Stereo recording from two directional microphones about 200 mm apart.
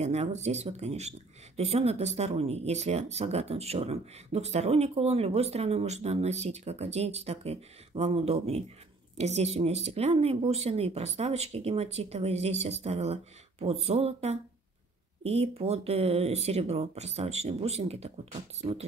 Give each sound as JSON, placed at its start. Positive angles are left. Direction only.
{"t": 0.0, "sound": "speech", "side_deg": -35}